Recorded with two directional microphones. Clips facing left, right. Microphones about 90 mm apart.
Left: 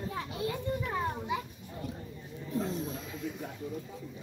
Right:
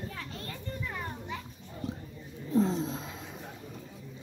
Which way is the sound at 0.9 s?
15° left (ahead or behind).